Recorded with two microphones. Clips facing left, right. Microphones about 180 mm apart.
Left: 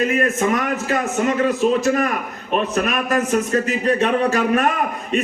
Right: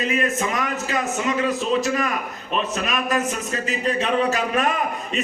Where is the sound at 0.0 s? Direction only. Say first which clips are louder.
Left 4 dB; 50° left (ahead or behind).